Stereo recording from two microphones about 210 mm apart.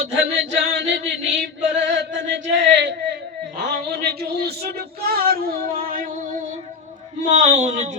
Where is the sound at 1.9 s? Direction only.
55° right (ahead or behind).